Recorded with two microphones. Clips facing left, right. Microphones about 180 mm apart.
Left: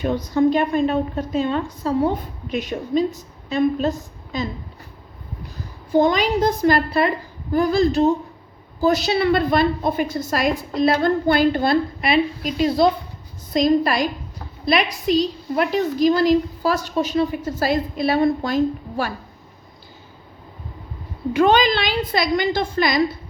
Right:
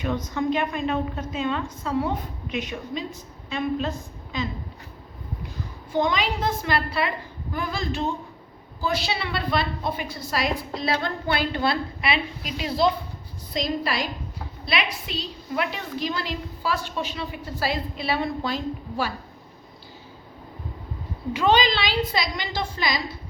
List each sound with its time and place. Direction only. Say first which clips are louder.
0.0 s a woman's voice: left 8 dB; 35° left (ahead or behind)
5.9 s a woman's voice: left 7 dB; 40° left (ahead or behind)
21.3 s a woman's voice: left 5 dB; 50° left (ahead or behind)